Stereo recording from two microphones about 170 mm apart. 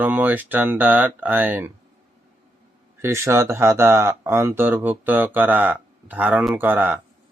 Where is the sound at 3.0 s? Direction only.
15° right (ahead or behind).